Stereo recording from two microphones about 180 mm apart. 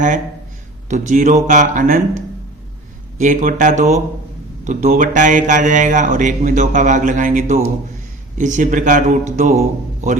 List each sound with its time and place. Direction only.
0.9 s speech: 40° right (ahead or behind)
3.2 s speech: 45° right (ahead or behind)